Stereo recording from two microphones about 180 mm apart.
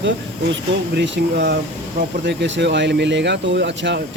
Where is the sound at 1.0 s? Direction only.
65° right (ahead or behind).